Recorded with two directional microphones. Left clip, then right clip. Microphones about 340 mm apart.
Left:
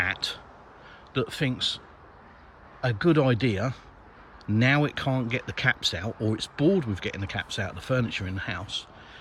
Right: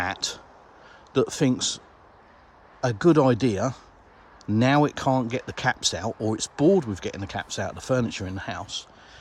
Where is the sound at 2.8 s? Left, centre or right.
Centre.